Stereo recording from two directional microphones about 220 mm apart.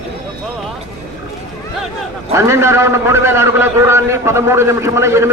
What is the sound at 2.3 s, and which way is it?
A man's voice, 10° right (ahead or behind).